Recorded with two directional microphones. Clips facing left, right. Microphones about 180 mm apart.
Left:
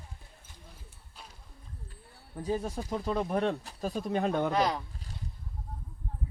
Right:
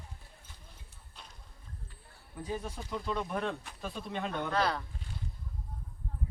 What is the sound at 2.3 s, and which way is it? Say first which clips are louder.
Speech: left 6 dB; 40° left (ahead or behind).